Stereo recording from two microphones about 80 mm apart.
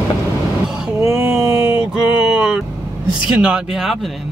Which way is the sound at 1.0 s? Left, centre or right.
Right.